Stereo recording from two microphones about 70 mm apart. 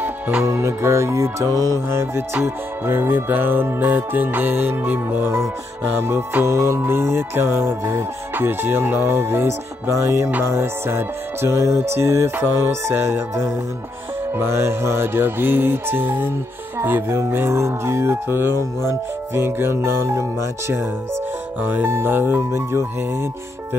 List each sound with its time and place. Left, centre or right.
0.0 s music: centre
0.5 s music: right
1.9 s music: right
16.8 s speech: right
17.2 s music: right
21.5 s speech: right
21.8 s music: right